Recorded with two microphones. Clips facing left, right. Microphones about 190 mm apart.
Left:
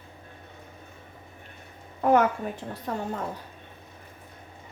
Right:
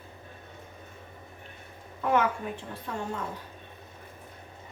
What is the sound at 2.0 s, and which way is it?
Speech, 40° left (ahead or behind).